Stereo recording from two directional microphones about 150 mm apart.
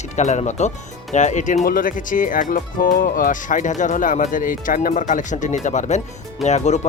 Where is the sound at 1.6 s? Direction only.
65° left (ahead or behind).